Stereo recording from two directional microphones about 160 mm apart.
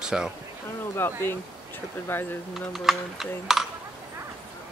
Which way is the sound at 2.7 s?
Centre (ahead or behind).